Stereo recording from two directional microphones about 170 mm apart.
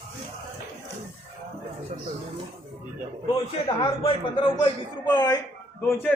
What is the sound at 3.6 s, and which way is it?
A man's voice, 30° left (ahead or behind).